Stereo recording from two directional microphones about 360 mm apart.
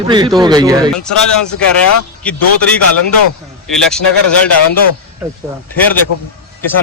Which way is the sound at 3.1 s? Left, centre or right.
Left.